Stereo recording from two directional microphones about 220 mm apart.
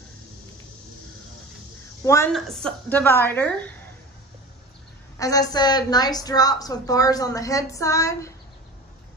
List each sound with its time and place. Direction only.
2.0 s a woman's voice: 15° left (ahead or behind)
2.3 s a woman's voice: centre (ahead or behind)
5.2 s a woman's voice: 15° left (ahead or behind)